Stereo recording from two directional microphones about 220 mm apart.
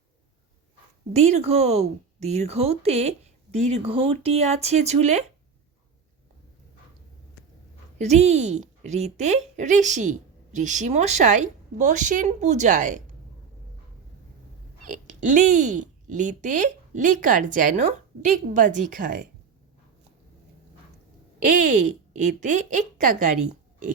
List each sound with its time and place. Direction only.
1.1 s speech: 30° right (ahead or behind)
7.9 s a woman's voice: 30° right (ahead or behind)
14.8 s a woman's voice: 35° right (ahead or behind)
21.3 s a woman's voice: 35° right (ahead or behind)